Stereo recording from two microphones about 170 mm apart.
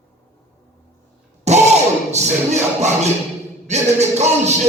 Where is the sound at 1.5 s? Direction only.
40° right (ahead or behind).